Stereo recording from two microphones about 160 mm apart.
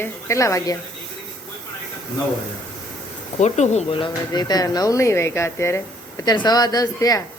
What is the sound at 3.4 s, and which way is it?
Speech, 45° left (ahead or behind).